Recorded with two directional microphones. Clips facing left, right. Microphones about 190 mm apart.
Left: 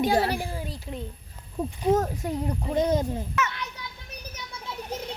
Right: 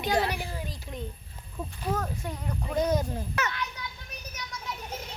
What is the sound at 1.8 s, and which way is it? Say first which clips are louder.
Speech: left 8 dB; 25° left (ahead or behind).